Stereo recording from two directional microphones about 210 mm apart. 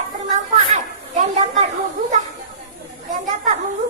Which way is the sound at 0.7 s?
35° right (ahead or behind).